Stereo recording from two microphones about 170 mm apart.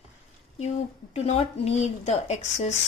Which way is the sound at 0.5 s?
35° left (ahead or behind).